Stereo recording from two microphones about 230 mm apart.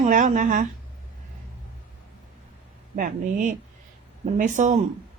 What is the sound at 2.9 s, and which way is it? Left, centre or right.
Speech, right.